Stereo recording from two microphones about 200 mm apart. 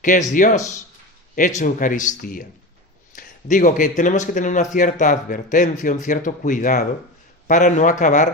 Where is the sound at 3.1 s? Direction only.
40° left (ahead or behind).